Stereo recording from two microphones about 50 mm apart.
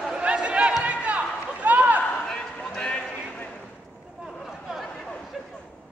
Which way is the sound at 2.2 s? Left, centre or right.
Centre.